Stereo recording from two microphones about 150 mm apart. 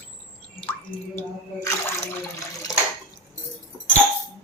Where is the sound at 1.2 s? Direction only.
15° left (ahead or behind).